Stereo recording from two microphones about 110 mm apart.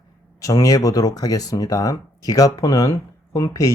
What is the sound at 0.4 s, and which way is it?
Speech, 35° left (ahead or behind).